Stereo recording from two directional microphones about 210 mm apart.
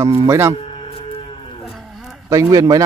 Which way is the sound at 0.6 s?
25° left (ahead or behind).